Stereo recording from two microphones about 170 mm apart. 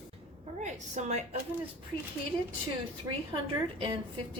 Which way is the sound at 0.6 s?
45° right (ahead or behind).